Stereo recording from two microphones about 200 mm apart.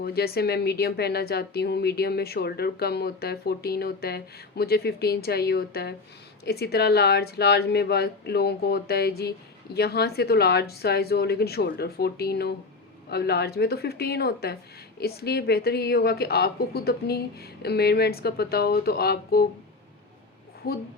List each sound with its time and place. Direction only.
0.0 s speech: 50° left (ahead or behind)